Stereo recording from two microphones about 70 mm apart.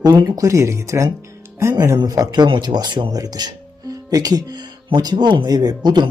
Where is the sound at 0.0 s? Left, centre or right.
Right.